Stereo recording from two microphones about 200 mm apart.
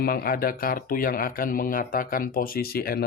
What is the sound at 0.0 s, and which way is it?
Speech, 50° left (ahead or behind).